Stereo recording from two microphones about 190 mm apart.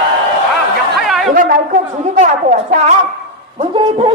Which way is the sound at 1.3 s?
45° right (ahead or behind).